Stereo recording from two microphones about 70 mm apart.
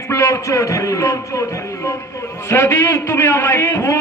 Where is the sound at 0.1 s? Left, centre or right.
Left.